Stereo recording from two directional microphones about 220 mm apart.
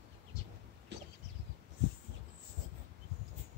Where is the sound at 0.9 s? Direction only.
50° right (ahead or behind).